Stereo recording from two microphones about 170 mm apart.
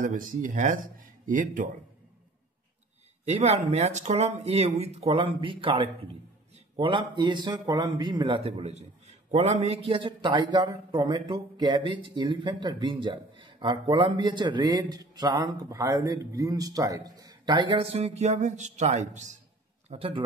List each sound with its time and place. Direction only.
0.0 s speech: 50° right (ahead or behind)
3.3 s a man's voice: 40° right (ahead or behind)
19.9 s speech: 30° right (ahead or behind)